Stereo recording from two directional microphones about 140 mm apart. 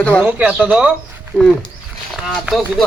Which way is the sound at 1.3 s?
10° left (ahead or behind).